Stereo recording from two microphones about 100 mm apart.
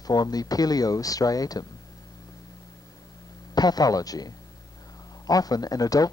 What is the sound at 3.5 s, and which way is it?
Speech, 40° left (ahead or behind).